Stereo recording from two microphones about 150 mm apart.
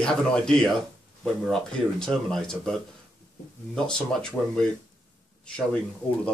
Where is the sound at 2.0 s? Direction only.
5° left (ahead or behind).